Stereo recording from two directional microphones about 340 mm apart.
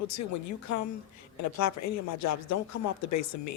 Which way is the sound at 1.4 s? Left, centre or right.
Left.